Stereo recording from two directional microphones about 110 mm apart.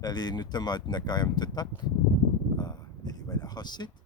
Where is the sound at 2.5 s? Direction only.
40° left (ahead or behind).